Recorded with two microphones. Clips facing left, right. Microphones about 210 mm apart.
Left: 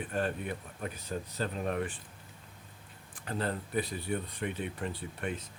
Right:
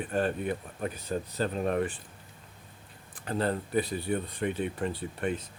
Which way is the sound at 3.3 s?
35° right (ahead or behind).